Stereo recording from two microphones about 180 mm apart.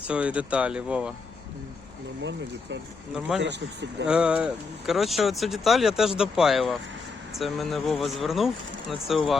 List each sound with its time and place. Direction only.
0.1 s speech: 5° right (ahead or behind)
3.4 s speech: 70° right (ahead or behind)
4.0 s speech: 5° right (ahead or behind)